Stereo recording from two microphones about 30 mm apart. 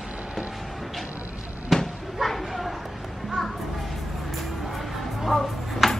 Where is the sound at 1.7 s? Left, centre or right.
Centre.